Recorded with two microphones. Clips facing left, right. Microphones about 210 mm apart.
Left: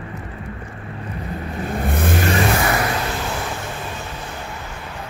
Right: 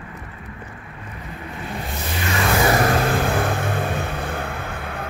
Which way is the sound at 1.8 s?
55° left (ahead or behind).